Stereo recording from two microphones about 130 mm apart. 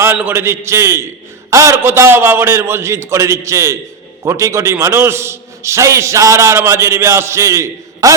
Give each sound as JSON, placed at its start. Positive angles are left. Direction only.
{"t": 0.0, "sound": "a man's voice", "side_deg": -15}